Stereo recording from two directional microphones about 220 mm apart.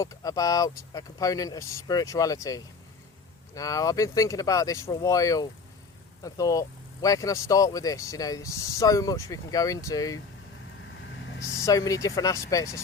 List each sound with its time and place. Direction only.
0.0 s speech: 15° left (ahead or behind)
11.6 s speech: 15° left (ahead or behind)